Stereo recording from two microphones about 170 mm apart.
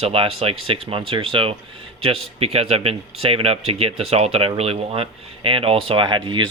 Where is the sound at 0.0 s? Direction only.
35° right (ahead or behind).